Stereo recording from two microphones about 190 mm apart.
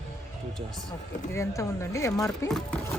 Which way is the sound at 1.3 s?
15° left (ahead or behind).